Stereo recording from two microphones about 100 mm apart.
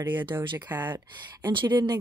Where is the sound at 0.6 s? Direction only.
20° right (ahead or behind).